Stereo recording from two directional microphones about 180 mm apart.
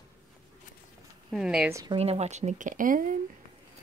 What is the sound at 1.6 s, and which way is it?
Speech, 15° right (ahead or behind).